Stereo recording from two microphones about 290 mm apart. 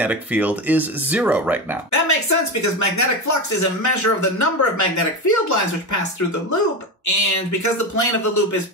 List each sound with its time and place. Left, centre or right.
0.0 s speech: centre
1.9 s speech: left
7.1 s speech: left